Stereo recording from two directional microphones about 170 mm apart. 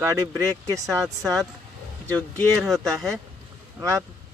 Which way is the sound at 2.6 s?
Centre (ahead or behind).